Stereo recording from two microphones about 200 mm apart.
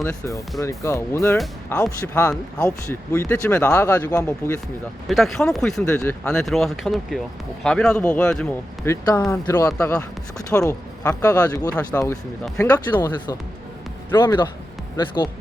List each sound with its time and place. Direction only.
0.0 s speech: 15° left (ahead or behind)
5.0 s speech: centre (ahead or behind)
12.7 s speech: 20° left (ahead or behind)